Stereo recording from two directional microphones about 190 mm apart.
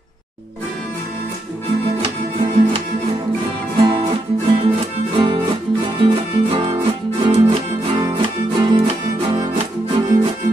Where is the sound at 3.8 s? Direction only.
25° right (ahead or behind).